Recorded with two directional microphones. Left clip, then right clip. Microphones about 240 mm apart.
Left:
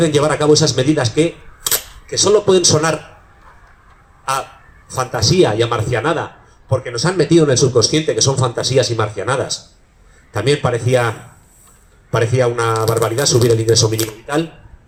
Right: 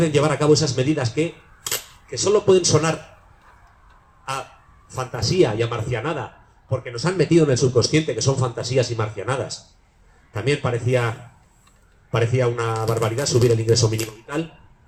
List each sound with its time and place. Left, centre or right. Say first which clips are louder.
0.0 s speech: left 5 dB; left
4.3 s a man's voice: left 9 dB; left
12.1 s a man's voice: left 6 dB; left